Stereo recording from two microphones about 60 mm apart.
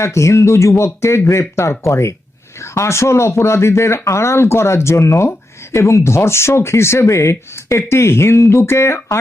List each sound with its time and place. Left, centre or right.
0.0 s speech: left